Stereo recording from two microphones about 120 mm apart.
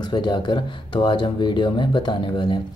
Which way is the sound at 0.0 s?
40° left (ahead or behind).